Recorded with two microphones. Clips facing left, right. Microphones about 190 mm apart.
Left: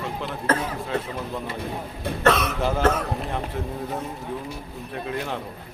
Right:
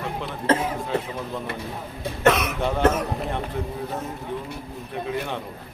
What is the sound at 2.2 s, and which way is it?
Speech, 15° right (ahead or behind).